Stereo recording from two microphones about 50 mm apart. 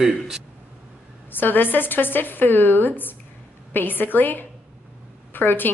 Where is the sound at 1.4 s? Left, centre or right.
Left.